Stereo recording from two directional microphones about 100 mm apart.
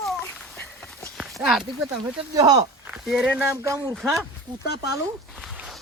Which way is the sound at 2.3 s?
40° right (ahead or behind).